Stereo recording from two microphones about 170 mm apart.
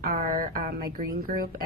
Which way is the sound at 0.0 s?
55° right (ahead or behind).